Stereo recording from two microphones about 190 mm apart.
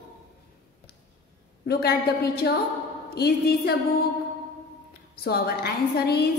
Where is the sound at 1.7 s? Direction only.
55° left (ahead or behind).